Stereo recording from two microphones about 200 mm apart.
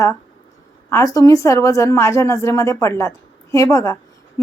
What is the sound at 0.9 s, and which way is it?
A woman's voice, 15° left (ahead or behind).